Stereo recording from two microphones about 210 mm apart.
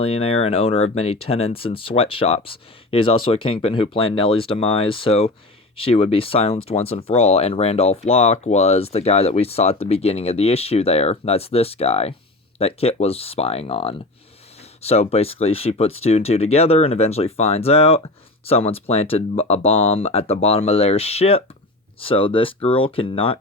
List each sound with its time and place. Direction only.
0.0 s speech: 25° left (ahead or behind)